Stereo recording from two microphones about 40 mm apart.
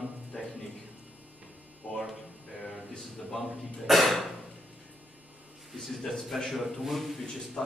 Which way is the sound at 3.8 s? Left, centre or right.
Centre.